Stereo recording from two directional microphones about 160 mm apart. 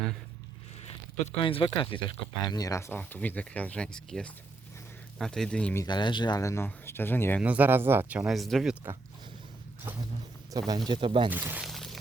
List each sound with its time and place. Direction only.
1.2 s speech: 35° left (ahead or behind); by 5.7 s 5° left (ahead or behind)
5.7 s speech: 25° left (ahead or behind)
7.4 s speech: 10° right (ahead or behind)
10.5 s speech: 20° right (ahead or behind)
11.3 s speech: 10° right (ahead or behind)
11.6 s pour: centre (ahead or behind)